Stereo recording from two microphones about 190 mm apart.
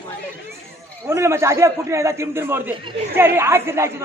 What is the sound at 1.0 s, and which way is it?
A man's voice, 15° right (ahead or behind).